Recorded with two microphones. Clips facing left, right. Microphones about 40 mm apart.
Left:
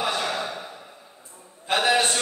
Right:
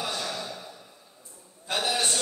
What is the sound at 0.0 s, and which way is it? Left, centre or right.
Gasp, left.